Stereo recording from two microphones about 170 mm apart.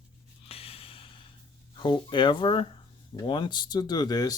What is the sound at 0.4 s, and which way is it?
Snort, 35° left (ahead or behind).